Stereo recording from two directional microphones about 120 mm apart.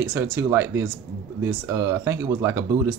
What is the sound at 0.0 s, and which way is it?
Speech, 25° right (ahead or behind).